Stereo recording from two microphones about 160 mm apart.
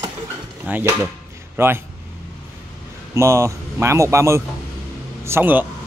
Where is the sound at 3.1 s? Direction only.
15° right (ahead or behind).